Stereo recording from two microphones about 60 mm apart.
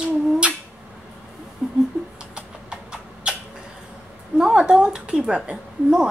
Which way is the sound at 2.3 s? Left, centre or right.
Centre.